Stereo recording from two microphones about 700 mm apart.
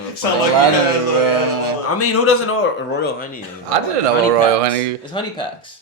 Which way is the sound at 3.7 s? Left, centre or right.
Right.